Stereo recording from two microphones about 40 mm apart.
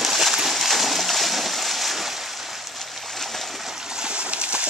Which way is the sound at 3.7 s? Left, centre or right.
Centre.